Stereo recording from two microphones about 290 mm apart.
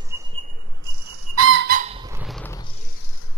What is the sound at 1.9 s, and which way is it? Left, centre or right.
Squeak, centre.